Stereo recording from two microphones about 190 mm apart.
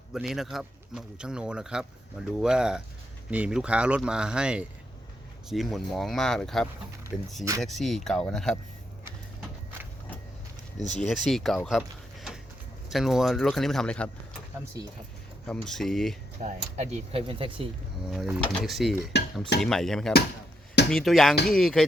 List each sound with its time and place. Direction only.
0.1 s speech: centre (ahead or behind)
10.8 s speech: 40° left (ahead or behind)
11.3 s speech: centre (ahead or behind)
15.4 s speech: centre (ahead or behind)
16.4 s speech: 40° right (ahead or behind)
18.1 s speech: centre (ahead or behind)